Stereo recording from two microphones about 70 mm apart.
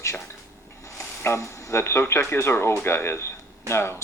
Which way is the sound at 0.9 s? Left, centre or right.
Left.